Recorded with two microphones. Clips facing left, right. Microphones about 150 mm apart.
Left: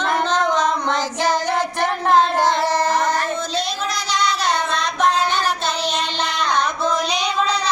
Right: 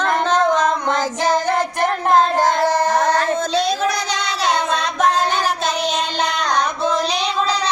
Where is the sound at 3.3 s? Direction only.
50° right (ahead or behind).